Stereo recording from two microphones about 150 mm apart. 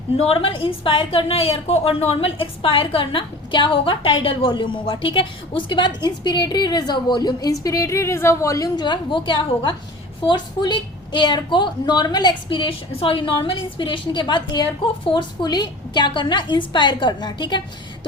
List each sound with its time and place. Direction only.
0.2 s a woman's voice: 40° left (ahead or behind)